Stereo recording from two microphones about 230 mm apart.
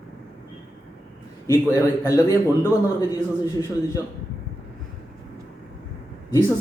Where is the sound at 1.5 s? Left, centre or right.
Centre.